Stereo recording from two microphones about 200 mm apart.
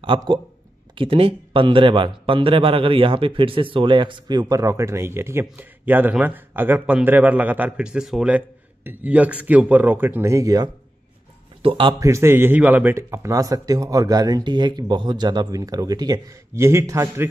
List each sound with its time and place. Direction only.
0.0 s speech: 25° right (ahead or behind)